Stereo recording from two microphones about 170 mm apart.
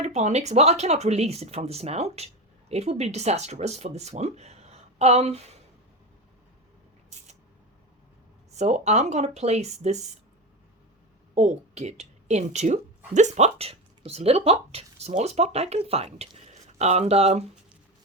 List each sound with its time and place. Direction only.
0.0 s speech: 40° right (ahead or behind)
8.5 s speech: 40° right (ahead or behind)
11.3 s a woman's voice: 40° right (ahead or behind)